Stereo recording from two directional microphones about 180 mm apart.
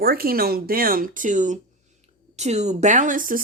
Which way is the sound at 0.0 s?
55° right (ahead or behind).